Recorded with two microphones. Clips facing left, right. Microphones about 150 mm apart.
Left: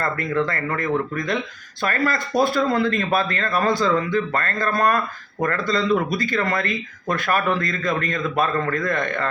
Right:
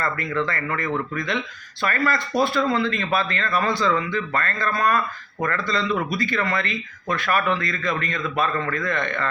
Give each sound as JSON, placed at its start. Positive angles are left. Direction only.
{"t": 0.0, "sound": "a man's voice", "side_deg": 45}